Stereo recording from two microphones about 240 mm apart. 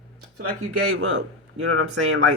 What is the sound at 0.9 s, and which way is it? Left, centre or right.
Speech, right.